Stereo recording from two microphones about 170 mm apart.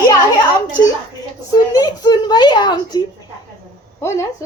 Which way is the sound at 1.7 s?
25° left (ahead or behind).